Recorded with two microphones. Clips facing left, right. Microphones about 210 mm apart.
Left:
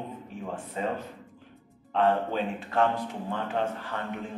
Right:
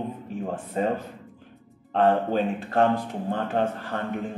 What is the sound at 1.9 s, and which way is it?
A man's voice, 40° right (ahead or behind).